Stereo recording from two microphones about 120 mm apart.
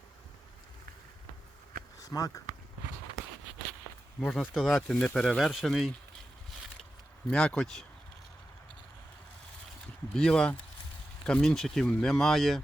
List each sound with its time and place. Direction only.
2.0 s a sound: 30° left (ahead or behind)
4.2 s speech: 5° left (ahead or behind)
7.3 s speech: 5° left (ahead or behind)
10.1 s speech: 5° left (ahead or behind)